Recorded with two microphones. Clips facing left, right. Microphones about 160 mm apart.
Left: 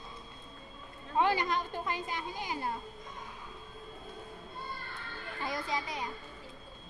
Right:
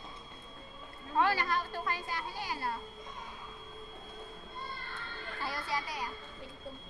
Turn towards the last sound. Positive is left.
turn(degrees=20)  # may be behind; listen again after turning